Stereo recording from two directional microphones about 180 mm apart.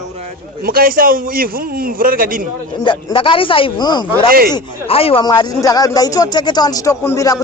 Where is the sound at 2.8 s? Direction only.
30° left (ahead or behind).